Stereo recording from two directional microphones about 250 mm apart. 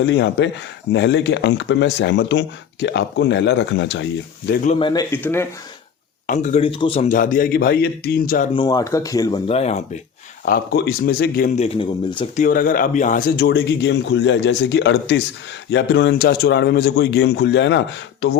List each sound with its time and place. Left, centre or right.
0.0 s speech: left
4.6 s speech: left
6.2 s speech: left
8.5 s speech: centre
10.4 s speech: left; by 12.3 s centre
12.4 s speech: left